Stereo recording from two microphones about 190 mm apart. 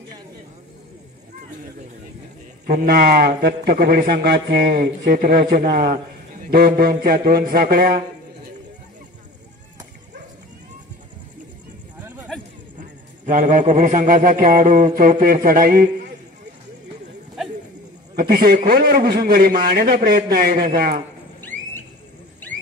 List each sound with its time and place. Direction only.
2.6 s a man's voice: 50° right (ahead or behind)
12.7 s a man's voice: 45° right (ahead or behind)
18.1 s a man's voice: 55° right (ahead or behind)
21.4 s a sound: 10° left (ahead or behind)